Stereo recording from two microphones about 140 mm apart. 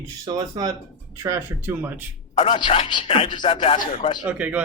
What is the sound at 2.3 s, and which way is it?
Speech, 55° left (ahead or behind).